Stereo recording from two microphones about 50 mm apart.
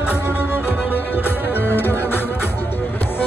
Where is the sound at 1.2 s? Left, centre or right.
Left.